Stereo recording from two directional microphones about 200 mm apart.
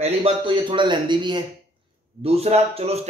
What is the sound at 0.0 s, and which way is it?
A man's voice, 25° right (ahead or behind).